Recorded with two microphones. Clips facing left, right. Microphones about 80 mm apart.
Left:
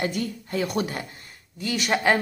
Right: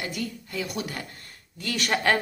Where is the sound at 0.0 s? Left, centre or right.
Left.